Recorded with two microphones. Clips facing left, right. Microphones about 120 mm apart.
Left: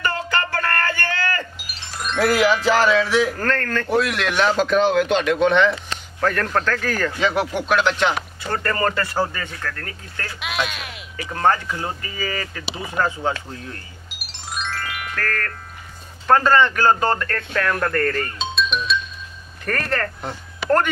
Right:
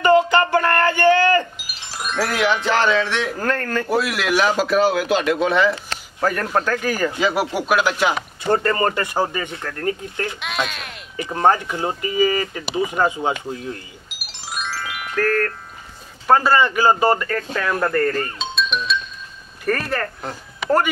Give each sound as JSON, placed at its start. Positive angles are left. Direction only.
{"t": 0.0, "sound": "a sound", "side_deg": -20}
{"t": 2.0, "sound": "speech", "side_deg": -5}
{"t": 3.3, "sound": "speech", "side_deg": -15}
{"t": 8.5, "sound": "speech", "side_deg": -25}
{"t": 10.4, "sound": "speech", "side_deg": 0}
{"t": 11.2, "sound": "speech", "side_deg": -20}
{"t": 14.0, "sound": "music", "side_deg": -5}
{"t": 16.3, "sound": "speech", "side_deg": -10}